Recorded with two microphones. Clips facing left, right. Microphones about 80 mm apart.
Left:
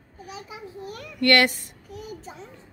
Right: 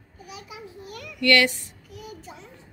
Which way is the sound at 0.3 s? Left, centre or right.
Left.